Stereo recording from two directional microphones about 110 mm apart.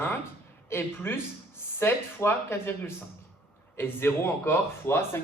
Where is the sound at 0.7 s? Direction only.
20° left (ahead or behind).